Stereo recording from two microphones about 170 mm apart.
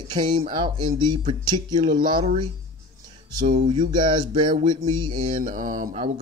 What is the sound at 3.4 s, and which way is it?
Speech, 40° right (ahead or behind).